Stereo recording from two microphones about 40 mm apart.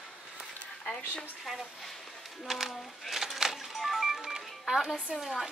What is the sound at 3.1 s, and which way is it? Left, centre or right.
Music, centre.